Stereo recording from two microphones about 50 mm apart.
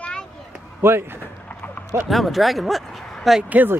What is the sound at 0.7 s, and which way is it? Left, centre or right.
Speech, right.